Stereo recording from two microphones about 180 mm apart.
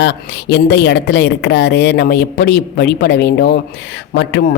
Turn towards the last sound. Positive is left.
turn(degrees=70)  # may be behind; listen again after turning